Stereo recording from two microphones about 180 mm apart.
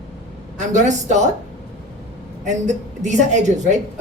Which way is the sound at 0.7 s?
40° right (ahead or behind).